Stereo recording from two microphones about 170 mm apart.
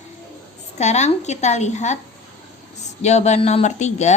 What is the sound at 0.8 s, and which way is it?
A woman's voice, 40° left (ahead or behind).